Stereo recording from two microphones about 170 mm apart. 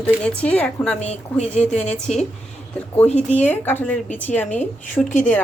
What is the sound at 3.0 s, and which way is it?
Speech, 40° left (ahead or behind).